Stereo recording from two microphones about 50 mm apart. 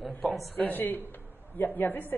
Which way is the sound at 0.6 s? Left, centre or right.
Left.